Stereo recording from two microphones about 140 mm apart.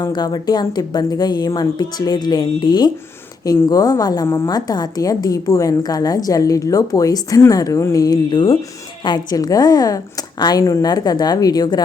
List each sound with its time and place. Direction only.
0.0 s a woman's voice: 30° left (ahead or behind)